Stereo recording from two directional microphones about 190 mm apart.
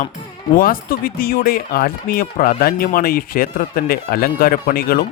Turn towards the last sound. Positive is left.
turn(degrees=50)  # may be behind; listen again after turning